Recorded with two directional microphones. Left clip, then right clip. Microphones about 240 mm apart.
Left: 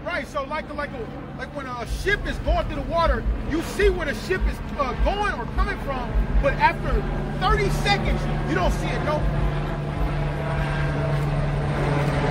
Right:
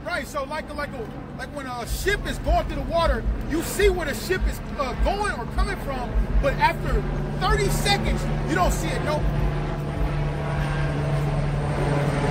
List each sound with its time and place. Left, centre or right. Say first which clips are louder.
2.0 s speech: left 1 dB; centre
10.4 s vehicle: left 2 dB; centre